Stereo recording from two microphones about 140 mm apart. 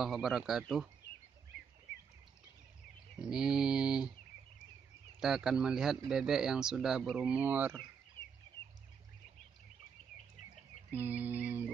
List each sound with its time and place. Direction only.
0.0 s speech: 5° right (ahead or behind)
3.2 s speech: 5° right (ahead or behind)
5.2 s speech: 5° right (ahead or behind)
10.9 s a sound: 10° right (ahead or behind)